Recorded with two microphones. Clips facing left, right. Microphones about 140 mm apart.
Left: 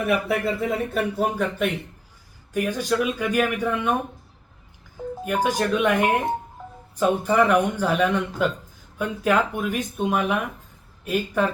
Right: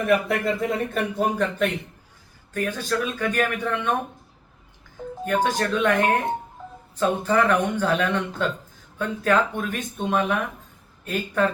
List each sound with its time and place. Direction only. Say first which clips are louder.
0.0 s speech: right 1 dB; 5° left (ahead or behind)
5.2 s speech: even; 10° left (ahead or behind)